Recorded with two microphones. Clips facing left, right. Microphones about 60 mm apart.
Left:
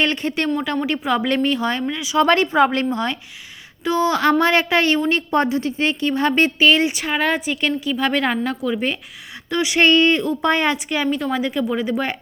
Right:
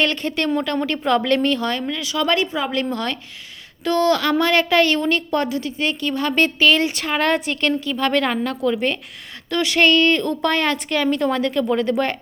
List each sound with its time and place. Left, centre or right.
0.0 s a woman's voice: left
2.1 s speech: left
2.9 s a woman's voice: centre
4.2 s a woman's voice: left
6.9 s a woman's voice: centre